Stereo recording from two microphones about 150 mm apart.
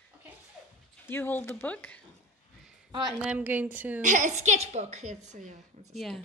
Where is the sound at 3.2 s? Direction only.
10° right (ahead or behind).